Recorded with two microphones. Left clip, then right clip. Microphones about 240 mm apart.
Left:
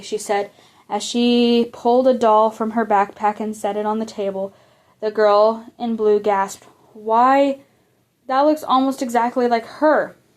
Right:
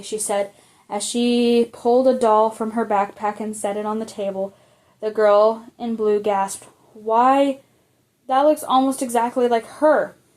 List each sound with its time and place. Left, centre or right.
0.0 s speech: left